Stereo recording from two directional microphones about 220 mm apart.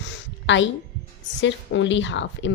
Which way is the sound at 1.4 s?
55° left (ahead or behind).